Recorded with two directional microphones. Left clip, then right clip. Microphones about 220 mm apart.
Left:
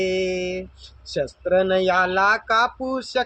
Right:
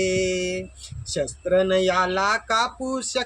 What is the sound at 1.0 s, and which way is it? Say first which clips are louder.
Speech: left 2 dB; 5° right (ahead or behind).